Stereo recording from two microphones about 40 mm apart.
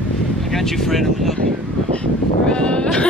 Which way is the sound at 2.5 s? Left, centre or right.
Left.